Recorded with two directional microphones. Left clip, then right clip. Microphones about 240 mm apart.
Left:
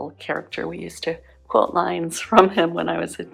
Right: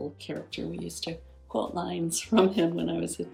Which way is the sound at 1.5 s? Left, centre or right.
Left.